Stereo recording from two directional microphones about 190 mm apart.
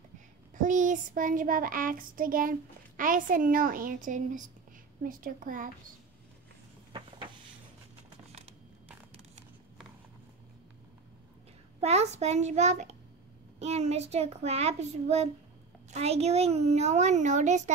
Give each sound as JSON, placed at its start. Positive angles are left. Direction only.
{"t": 0.6, "sound": "child singing", "side_deg": -40}
{"t": 3.0, "sound": "a woman's voice", "side_deg": -45}
{"t": 8.3, "sound": "a sound", "side_deg": -35}
{"t": 11.8, "sound": "a child's voice", "side_deg": -35}